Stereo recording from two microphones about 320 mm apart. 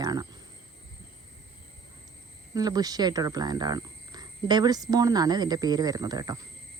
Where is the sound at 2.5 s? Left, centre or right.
Centre.